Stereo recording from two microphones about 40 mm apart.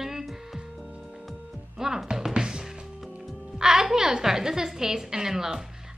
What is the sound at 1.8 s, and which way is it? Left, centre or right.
A woman's voice, centre.